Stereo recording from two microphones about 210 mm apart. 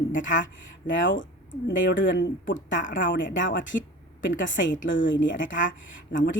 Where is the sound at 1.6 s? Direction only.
60° left (ahead or behind).